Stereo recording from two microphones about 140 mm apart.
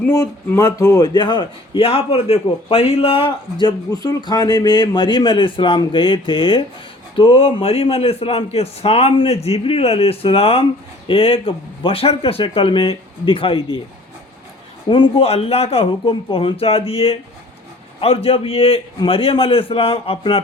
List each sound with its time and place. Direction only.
0.1 s a man's voice: 25° left (ahead or behind); by 13.7 s 40° left (ahead or behind)
14.8 s a man's voice: 35° left (ahead or behind)